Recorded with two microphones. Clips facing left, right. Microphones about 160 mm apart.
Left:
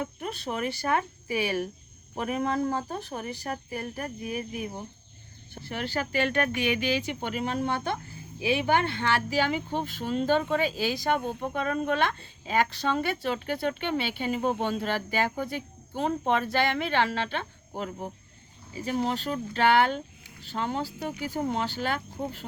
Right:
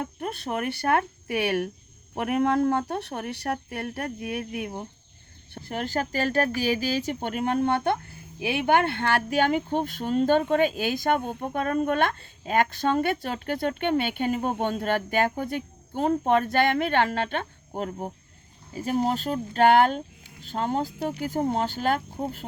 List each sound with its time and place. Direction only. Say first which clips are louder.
0.0 s speech: right 2 dB; 55° right (ahead or behind); by 4.7 s 70° right (ahead or behind)
5.7 s speech: right 2 dB; 45° right (ahead or behind)